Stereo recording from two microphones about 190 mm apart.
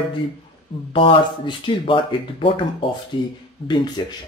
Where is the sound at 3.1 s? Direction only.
20° left (ahead or behind).